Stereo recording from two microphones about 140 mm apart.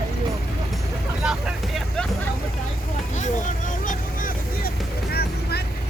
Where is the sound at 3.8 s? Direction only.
75° left (ahead or behind).